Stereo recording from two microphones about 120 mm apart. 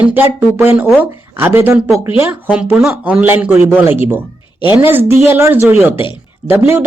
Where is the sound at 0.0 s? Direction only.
15° right (ahead or behind).